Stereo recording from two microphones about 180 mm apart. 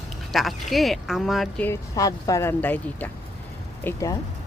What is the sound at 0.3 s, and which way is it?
Speech, centre (ahead or behind).